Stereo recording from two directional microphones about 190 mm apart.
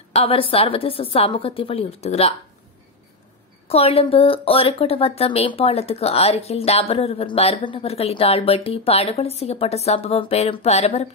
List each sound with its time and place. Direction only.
0.1 s a woman's voice: 30° left (ahead or behind)
3.6 s speech: 35° left (ahead or behind)